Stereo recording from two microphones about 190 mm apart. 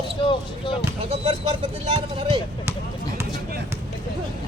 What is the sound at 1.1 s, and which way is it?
Speech, 30° right (ahead or behind).